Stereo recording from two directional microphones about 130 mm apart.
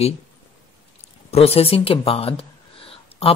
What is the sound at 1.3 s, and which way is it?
A man's voice, 50° left (ahead or behind).